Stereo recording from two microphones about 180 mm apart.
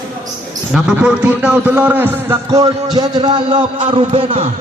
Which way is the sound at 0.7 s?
5° right (ahead or behind).